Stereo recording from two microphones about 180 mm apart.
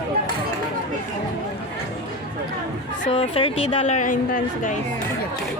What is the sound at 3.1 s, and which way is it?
A woman's voice, 30° left (ahead or behind).